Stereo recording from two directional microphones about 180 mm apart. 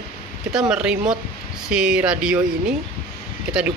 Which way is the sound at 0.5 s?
5° right (ahead or behind).